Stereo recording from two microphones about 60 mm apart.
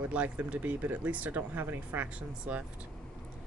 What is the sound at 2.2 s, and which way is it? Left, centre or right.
Speech, right.